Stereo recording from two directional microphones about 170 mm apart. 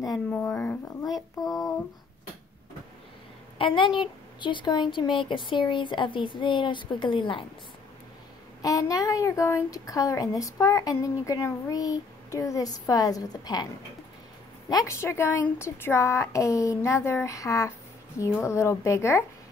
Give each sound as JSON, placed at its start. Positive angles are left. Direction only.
{"t": 0.1, "sound": "a woman's voice", "side_deg": 10}
{"t": 3.5, "sound": "a woman's voice", "side_deg": 30}
{"t": 8.6, "sound": "a woman's voice", "side_deg": 20}
{"t": 14.7, "sound": "speech", "side_deg": 20}